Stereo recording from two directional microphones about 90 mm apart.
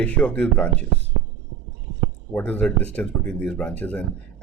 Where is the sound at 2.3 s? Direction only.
15° left (ahead or behind).